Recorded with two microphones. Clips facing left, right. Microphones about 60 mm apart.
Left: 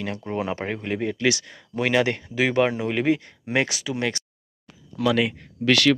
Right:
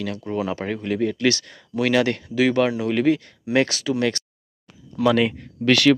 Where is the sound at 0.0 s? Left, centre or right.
Left; by 3.9 s centre.